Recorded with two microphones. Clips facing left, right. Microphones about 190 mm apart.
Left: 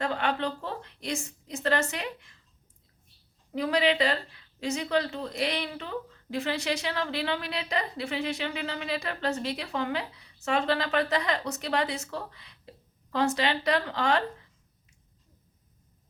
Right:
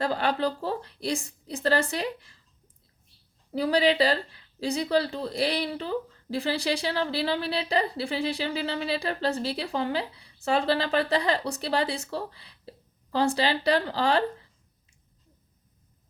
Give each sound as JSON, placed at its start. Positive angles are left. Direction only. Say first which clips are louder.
{"t": 0.0, "sound": "speech", "louder": "right 3 dB", "side_deg": -35}
{"t": 3.5, "sound": "speech", "louder": "right 3 dB", "side_deg": -35}